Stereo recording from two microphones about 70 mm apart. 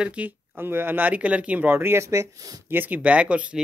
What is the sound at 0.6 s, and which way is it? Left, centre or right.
Speech, right.